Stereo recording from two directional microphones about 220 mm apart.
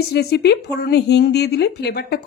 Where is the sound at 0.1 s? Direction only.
45° left (ahead or behind).